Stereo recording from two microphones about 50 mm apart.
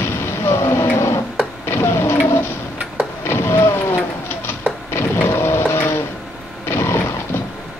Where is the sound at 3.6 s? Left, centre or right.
Left.